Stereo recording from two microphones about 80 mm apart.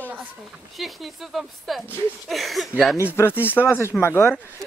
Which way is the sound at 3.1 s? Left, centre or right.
Left.